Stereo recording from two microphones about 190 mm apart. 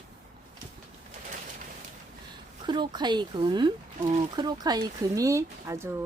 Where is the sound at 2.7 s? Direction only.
25° right (ahead or behind).